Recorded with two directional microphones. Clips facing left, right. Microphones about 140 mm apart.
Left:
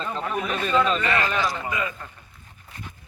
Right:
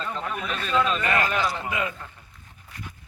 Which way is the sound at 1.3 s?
10° right (ahead or behind).